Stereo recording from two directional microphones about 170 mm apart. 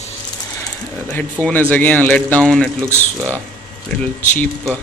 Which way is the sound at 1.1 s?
10° left (ahead or behind).